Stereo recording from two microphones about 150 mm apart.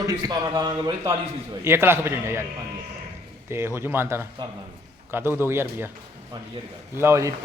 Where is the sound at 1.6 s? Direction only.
15° right (ahead or behind).